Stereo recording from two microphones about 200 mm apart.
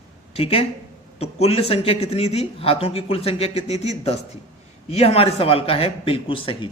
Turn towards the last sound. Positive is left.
turn(degrees=25)  # may be behind; listen again after turning